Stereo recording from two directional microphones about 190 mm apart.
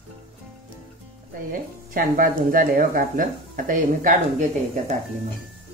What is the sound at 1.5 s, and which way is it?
Speech, 45° right (ahead or behind).